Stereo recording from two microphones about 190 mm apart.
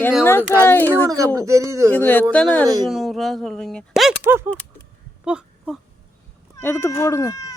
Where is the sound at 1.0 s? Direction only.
20° right (ahead or behind).